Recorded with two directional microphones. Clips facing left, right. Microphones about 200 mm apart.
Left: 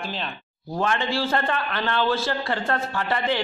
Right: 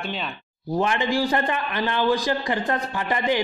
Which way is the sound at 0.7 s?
15° right (ahead or behind).